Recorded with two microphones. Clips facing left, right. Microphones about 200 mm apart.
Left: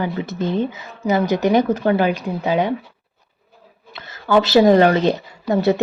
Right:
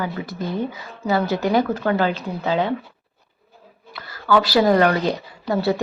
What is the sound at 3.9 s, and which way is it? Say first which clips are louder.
Speech: left 2 dB; 25° left (ahead or behind).